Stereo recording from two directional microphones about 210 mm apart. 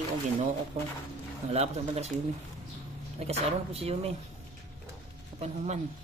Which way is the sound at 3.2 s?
30° right (ahead or behind).